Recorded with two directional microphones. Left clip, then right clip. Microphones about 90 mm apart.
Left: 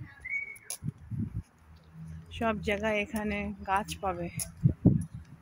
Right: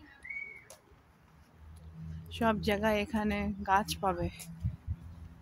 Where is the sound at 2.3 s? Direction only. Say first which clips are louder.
Even; 25° right (ahead or behind).